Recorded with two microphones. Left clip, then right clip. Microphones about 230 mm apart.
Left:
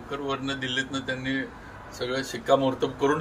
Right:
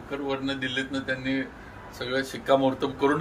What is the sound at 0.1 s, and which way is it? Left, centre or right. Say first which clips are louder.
Speech: even; centre.